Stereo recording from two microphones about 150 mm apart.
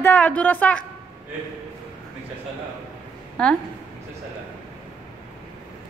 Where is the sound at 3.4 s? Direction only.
5° left (ahead or behind).